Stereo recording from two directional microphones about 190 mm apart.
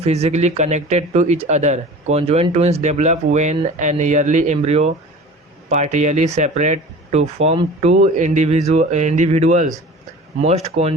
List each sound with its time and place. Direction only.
0.0 s speech: 35° right (ahead or behind)